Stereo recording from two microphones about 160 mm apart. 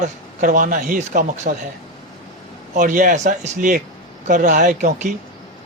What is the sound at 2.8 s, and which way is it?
Speech, 55° right (ahead or behind).